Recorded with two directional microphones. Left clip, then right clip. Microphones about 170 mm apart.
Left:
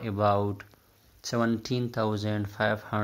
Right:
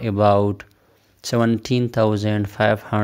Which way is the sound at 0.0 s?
45° right (ahead or behind).